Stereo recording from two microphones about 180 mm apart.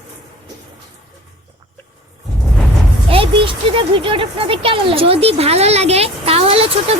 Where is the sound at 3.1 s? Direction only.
30° right (ahead or behind).